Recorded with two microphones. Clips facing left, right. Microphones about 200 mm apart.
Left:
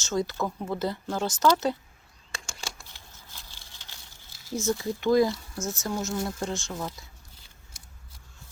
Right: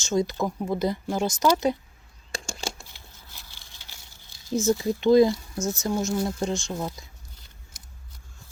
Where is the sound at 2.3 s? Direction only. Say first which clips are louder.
Right 7 dB; 30° right (ahead or behind).